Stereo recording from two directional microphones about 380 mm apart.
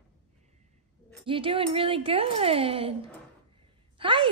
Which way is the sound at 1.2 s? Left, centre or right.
Centre.